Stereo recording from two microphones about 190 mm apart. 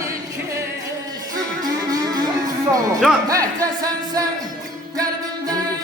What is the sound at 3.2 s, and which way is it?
Music, 20° right (ahead or behind).